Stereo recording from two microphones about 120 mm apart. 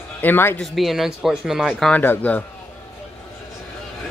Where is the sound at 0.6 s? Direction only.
Centre (ahead or behind).